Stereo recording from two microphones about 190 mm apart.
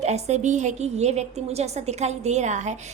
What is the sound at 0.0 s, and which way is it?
A woman's voice, 35° right (ahead or behind).